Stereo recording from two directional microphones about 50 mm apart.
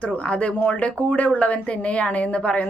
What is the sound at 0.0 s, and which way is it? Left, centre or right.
A woman's voice, left.